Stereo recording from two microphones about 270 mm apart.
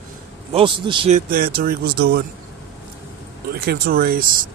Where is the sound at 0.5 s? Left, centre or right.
Centre.